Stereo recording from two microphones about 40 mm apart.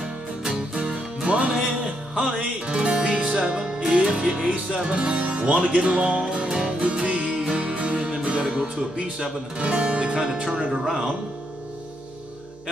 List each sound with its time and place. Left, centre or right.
0.5 s music: right
1.5 s music: centre
2.6 s music: right
4.5 s speech: right
5.9 s music: right
8.2 s speech: right; by 11.1 s centre